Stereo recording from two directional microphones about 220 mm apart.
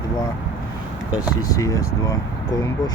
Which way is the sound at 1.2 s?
15° left (ahead or behind).